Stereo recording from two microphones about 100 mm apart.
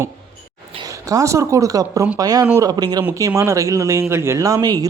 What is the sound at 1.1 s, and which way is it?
Speech, 30° right (ahead or behind).